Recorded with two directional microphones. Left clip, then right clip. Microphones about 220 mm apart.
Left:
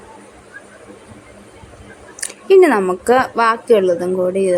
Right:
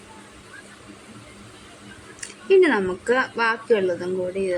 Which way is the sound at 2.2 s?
20° left (ahead or behind).